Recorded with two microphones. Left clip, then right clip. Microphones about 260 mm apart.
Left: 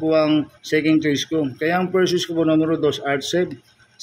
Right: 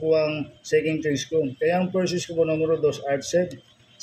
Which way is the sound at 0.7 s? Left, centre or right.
Left.